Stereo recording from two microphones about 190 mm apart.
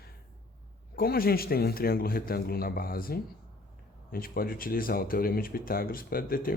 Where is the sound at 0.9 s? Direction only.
50° left (ahead or behind).